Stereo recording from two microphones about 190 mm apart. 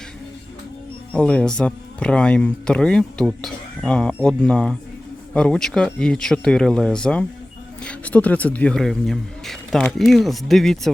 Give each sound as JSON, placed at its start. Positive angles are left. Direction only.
{"t": 1.1, "sound": "speech", "side_deg": 5}